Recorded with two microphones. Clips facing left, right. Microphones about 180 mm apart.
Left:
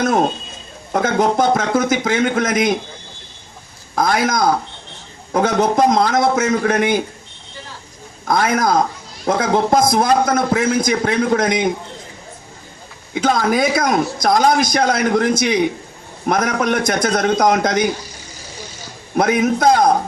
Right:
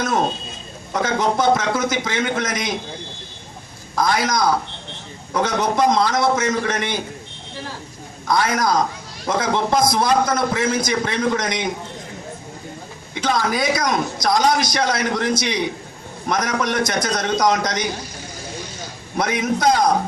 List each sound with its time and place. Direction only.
0.9 s a man's voice: 50° left (ahead or behind)
3.9 s a man's voice: 50° left (ahead or behind)
8.3 s a man's voice: 55° left (ahead or behind)
13.1 s a man's voice: 50° left (ahead or behind)
19.1 s a man's voice: 55° left (ahead or behind)